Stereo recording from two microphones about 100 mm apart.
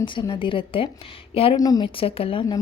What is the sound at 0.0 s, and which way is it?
A woman's voice, 55° left (ahead or behind).